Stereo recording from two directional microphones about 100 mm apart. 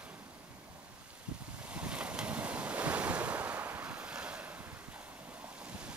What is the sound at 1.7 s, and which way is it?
Waves, 10° right (ahead or behind).